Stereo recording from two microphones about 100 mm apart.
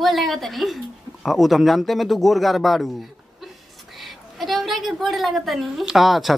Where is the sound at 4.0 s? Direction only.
Centre (ahead or behind).